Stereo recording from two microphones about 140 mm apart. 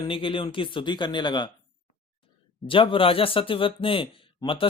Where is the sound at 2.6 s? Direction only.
40° left (ahead or behind).